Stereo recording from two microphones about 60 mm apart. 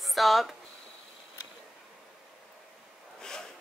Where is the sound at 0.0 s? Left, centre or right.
Centre.